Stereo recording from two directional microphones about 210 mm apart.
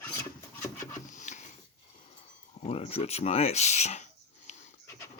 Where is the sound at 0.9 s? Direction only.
35° left (ahead or behind).